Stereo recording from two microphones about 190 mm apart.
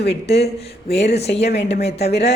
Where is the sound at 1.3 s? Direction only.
65° left (ahead or behind).